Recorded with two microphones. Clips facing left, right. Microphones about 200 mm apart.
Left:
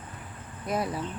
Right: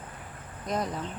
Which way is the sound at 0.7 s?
5° left (ahead or behind).